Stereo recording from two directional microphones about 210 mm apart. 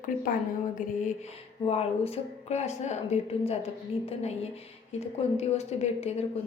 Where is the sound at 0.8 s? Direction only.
35° left (ahead or behind).